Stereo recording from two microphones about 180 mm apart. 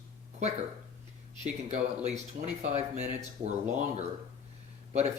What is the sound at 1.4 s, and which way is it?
Speech, 40° right (ahead or behind).